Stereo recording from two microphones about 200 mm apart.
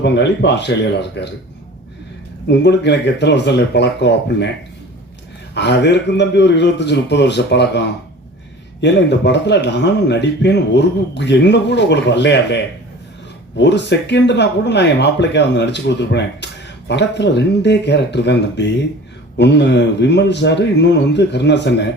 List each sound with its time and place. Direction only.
0.0 s speech: 60° left (ahead or behind)
2.5 s speech: 60° left (ahead or behind)
5.5 s speech: 60° left (ahead or behind)